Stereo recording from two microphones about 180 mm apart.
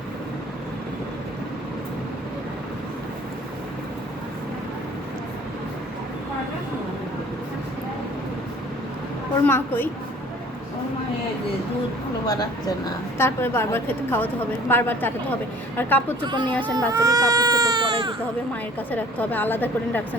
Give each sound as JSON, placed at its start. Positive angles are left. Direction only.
{"t": 9.5, "sound": "a woman's voice", "side_deg": 10}
{"t": 12.2, "sound": "a woman's voice", "side_deg": 20}
{"t": 16.2, "sound": "speech", "side_deg": -25}
{"t": 16.5, "sound": "a woman's voice", "side_deg": 10}
{"t": 16.9, "sound": "speech", "side_deg": -20}
{"t": 18.9, "sound": "a woman's voice", "side_deg": 10}